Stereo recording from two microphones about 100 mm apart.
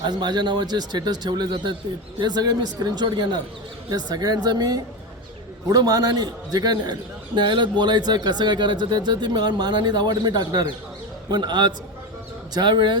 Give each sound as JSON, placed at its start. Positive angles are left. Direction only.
{"t": 0.0, "sound": "a man's voice", "side_deg": -50}